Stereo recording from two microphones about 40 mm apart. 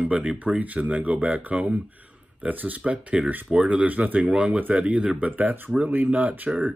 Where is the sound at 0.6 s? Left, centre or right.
Right.